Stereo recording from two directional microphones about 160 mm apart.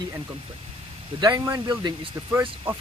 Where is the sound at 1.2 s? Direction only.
20° right (ahead or behind).